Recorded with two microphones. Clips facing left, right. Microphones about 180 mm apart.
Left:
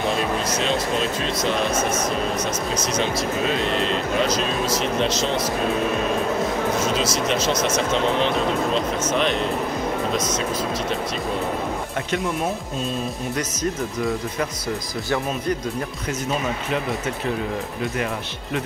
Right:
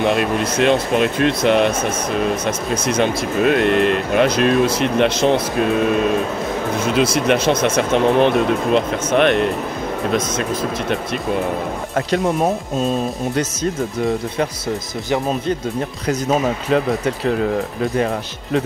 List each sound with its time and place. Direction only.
0.0 s speech: 60° right (ahead or behind)
6.8 s speech: 55° right (ahead or behind)
12.1 s speech: 40° right (ahead or behind)
16.1 s speech: 35° right (ahead or behind)